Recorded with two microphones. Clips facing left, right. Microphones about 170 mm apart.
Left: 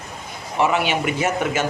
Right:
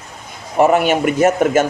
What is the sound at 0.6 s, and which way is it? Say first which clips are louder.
Speech: right 7 dB; 45° right (ahead or behind).